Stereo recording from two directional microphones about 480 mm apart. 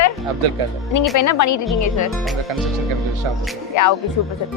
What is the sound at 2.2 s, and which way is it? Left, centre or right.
Speech, centre.